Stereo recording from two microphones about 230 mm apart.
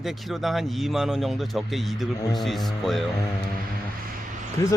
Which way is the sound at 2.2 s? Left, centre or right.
Centre.